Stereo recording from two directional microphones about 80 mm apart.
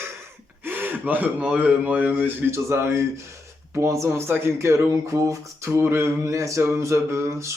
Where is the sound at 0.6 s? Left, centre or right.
Right.